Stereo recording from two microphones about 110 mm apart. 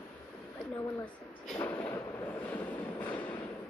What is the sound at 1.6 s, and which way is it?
Train, 20° left (ahead or behind).